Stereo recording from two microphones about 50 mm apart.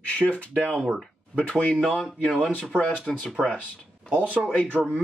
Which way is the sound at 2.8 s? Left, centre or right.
Left.